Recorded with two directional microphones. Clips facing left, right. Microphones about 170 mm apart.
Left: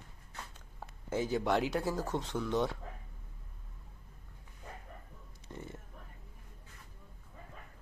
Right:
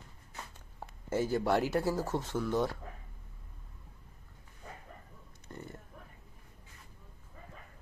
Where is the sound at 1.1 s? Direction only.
5° right (ahead or behind).